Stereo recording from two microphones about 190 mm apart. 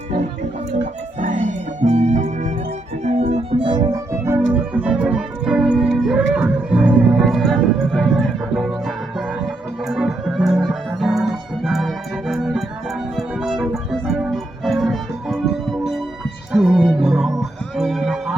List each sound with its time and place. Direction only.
0.7 s music: 40° right (ahead or behind); by 8.7 s centre (ahead or behind)
9.9 s music: centre (ahead or behind)